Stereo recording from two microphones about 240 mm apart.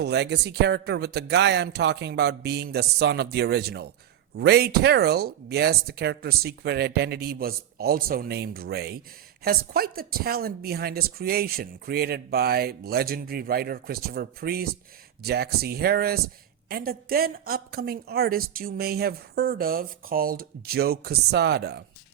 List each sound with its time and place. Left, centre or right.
0.0 s a man's voice: right